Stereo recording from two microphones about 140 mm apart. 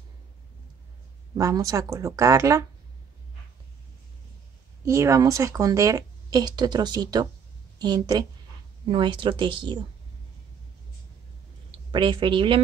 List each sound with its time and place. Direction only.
1.3 s a woman's voice: 25° right (ahead or behind)
4.8 s a woman's voice: 20° right (ahead or behind); by 9.8 s 35° right (ahead or behind)
11.9 s speech: 35° right (ahead or behind)